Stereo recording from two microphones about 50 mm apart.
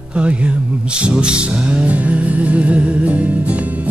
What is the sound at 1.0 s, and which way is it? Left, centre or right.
Music, centre.